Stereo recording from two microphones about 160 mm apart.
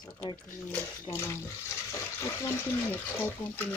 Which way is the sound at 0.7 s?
15° left (ahead or behind).